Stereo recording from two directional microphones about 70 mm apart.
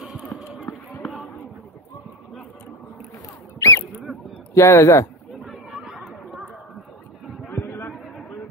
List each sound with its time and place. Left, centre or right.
0.0 s a sound: centre
3.5 s squeak: left
4.6 s speech: left
5.3 s chatter: centre
7.5 s chatter: left